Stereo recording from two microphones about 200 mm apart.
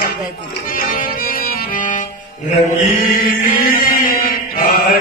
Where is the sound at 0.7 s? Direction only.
45° left (ahead or behind).